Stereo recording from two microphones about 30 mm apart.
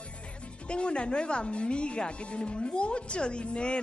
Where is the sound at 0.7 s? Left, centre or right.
Left.